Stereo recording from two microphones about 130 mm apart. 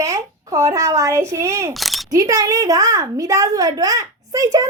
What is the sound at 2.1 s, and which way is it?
A woman's voice, 25° right (ahead or behind).